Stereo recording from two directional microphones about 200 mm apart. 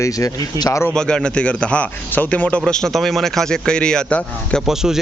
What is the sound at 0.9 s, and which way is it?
A man's voice, 5° left (ahead or behind).